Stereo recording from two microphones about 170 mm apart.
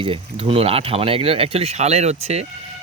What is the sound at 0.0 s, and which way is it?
Speech, 30° right (ahead or behind).